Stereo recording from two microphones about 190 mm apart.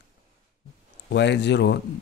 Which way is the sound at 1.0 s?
65° left (ahead or behind).